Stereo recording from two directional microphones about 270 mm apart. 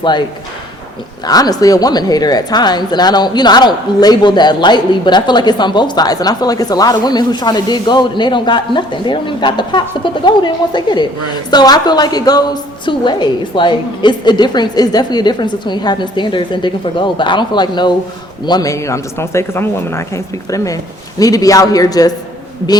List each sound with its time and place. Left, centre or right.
0.0 s a woman's voice: centre
1.3 s a woman's voice: centre